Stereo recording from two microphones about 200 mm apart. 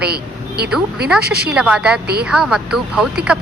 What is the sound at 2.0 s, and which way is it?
Speech, 55° right (ahead or behind).